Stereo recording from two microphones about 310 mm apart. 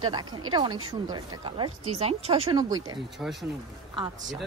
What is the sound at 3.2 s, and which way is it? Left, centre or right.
Speech, centre.